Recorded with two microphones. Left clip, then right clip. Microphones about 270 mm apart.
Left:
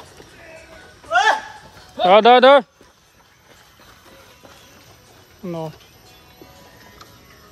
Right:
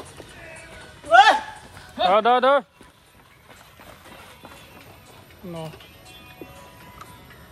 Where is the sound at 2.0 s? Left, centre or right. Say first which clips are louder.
Left 7 dB; left.